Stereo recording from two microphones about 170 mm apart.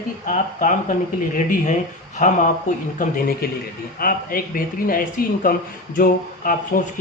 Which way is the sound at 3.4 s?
60° left (ahead or behind).